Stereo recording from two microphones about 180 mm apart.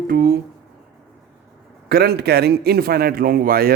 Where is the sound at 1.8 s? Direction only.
60° right (ahead or behind).